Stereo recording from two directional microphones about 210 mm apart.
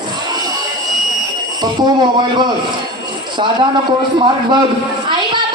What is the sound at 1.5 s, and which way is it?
Speech, 20° right (ahead or behind).